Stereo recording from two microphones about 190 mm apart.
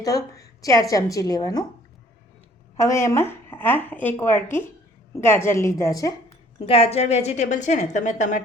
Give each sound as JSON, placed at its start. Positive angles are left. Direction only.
{"t": 0.0, "sound": "a woman's voice", "side_deg": 20}
{"t": 2.7, "sound": "speech", "side_deg": 15}
{"t": 6.7, "sound": "a woman's voice", "side_deg": 30}